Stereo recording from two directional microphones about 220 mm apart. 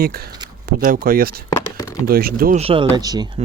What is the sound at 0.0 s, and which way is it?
Speech, 45° right (ahead or behind).